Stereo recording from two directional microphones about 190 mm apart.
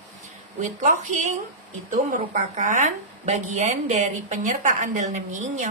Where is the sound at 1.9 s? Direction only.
45° right (ahead or behind).